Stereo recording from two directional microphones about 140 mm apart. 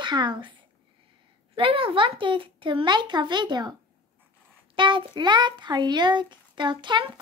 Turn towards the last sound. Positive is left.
turn(degrees=-35)  # may be behind; listen again after turning